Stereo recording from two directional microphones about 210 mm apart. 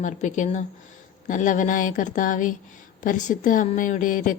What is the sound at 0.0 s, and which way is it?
A woman's voice, 35° left (ahead or behind).